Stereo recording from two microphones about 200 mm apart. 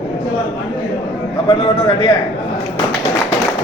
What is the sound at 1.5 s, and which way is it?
Speech, 25° left (ahead or behind).